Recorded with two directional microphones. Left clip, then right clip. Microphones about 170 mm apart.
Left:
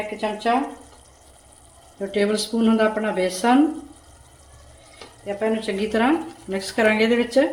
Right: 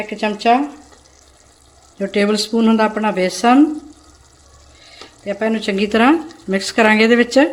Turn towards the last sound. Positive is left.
turn(degrees=-50)  # may be behind; listen again after turning